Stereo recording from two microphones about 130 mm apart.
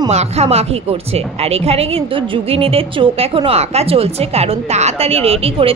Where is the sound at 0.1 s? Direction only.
55° right (ahead or behind).